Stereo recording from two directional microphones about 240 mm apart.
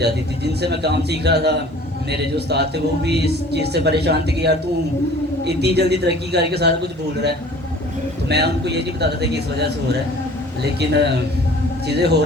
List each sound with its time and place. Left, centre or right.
0.0 s speech: right
8.3 s speech: right
10.8 s speech: right